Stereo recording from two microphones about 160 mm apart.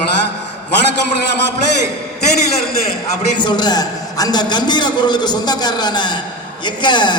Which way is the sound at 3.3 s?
30° left (ahead or behind).